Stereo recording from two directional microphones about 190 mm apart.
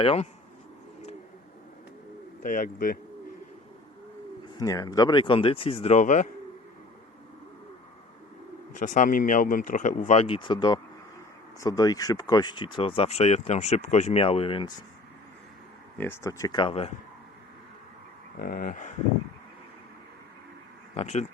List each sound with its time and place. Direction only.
0.0 s speech: 30° left (ahead or behind)
2.4 s speech: 45° left (ahead or behind)
4.5 s speech: 20° left (ahead or behind); by 6.2 s 40° left (ahead or behind)
8.7 s speech: 45° left (ahead or behind); by 14.7 s 25° left (ahead or behind)
16.0 s speech: 15° left (ahead or behind); by 16.9 s 30° left (ahead or behind)
18.3 s speech: 50° left (ahead or behind)
20.9 s speech: 35° left (ahead or behind)